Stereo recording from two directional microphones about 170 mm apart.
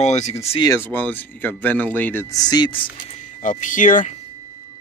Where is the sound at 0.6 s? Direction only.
15° left (ahead or behind).